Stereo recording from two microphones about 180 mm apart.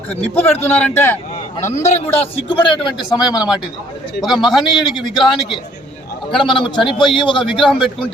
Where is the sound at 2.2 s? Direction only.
30° left (ahead or behind).